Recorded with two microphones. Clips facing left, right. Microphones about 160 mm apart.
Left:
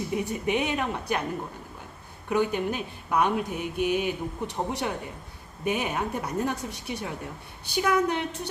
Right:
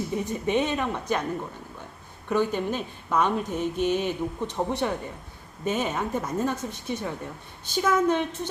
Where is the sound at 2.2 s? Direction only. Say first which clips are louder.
Right 1 dB; 10° left (ahead or behind).